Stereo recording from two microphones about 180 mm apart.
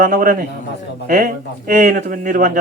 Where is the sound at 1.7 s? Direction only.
50° right (ahead or behind).